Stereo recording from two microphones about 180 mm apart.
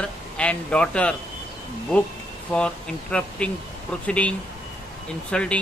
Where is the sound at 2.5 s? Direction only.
5° left (ahead or behind).